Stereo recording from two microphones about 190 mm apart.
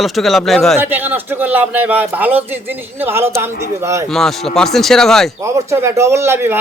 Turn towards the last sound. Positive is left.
turn(degrees=-10)  # may be behind; listen again after turning